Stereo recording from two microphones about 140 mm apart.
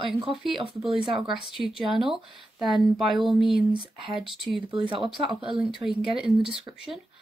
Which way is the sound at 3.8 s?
40° right (ahead or behind).